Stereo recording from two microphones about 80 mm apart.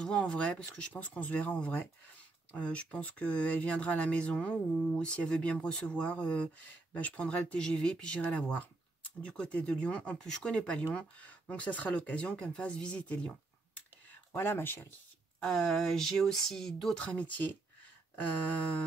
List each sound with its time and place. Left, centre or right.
0.0 s speech: centre
14.3 s speech: left
15.4 s speech: centre